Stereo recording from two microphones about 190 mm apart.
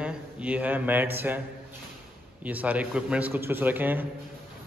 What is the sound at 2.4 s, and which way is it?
A man's voice, 10° right (ahead or behind).